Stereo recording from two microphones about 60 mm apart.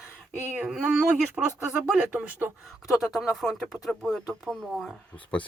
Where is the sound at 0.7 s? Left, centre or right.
Centre.